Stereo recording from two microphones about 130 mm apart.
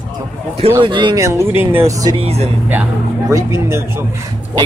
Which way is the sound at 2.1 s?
50° right (ahead or behind).